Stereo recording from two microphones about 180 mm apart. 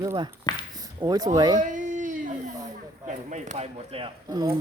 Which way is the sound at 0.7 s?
20° right (ahead or behind).